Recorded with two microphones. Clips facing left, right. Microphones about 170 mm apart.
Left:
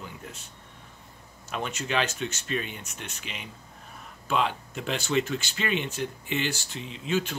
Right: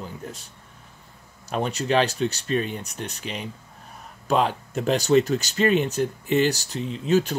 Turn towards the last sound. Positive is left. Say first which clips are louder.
# right 7 dB
turn(degrees=-40)  # may be behind; listen again after turning